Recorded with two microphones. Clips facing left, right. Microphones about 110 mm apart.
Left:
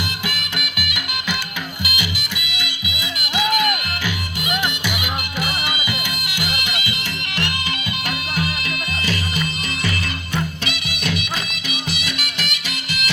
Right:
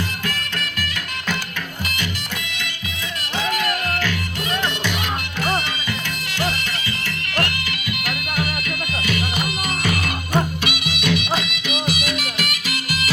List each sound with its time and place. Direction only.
0.3 s music: 10° left (ahead or behind)
8.0 s music: 30° left (ahead or behind)
10.3 s music: 50° right (ahead or behind)
11.0 s music: 40° left (ahead or behind)
11.7 s music: 45° right (ahead or behind)